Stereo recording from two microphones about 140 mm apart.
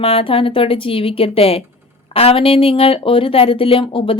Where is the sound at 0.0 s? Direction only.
40° left (ahead or behind).